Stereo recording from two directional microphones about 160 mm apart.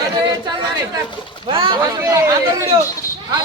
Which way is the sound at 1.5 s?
30° right (ahead or behind).